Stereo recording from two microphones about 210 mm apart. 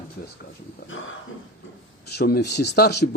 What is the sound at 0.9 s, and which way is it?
Speech, 70° left (ahead or behind).